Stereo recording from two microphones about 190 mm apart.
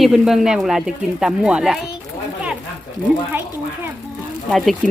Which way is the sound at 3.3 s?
10° right (ahead or behind).